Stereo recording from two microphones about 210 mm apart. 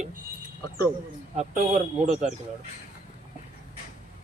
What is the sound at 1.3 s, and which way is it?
Speech, 30° right (ahead or behind).